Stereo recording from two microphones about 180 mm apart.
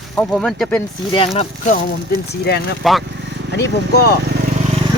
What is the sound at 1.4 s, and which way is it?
Speech, 45° left (ahead or behind).